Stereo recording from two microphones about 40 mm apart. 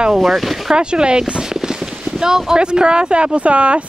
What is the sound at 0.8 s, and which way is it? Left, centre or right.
Speech, right.